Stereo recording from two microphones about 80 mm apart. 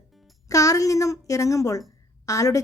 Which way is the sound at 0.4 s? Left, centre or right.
Left.